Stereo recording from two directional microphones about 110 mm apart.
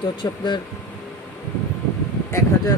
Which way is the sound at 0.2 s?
30° left (ahead or behind).